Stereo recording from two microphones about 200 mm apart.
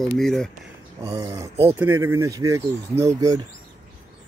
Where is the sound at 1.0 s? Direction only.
15° right (ahead or behind).